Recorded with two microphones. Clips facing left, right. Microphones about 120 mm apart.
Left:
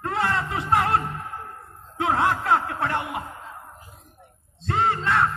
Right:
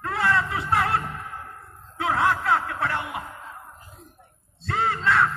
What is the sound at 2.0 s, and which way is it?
Music, 20° left (ahead or behind).